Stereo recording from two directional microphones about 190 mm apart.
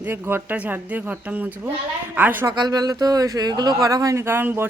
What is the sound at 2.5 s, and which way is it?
Speech, 20° right (ahead or behind).